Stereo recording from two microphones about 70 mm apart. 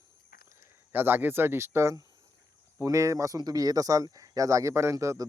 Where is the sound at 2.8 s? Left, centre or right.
Right.